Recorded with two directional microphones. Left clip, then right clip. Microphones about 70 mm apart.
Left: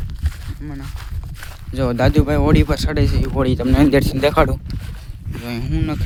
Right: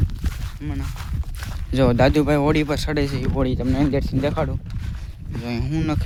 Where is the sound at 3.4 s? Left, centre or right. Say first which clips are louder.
Left 8 dB; left.